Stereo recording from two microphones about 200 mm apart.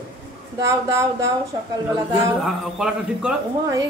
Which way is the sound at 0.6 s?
15° right (ahead or behind).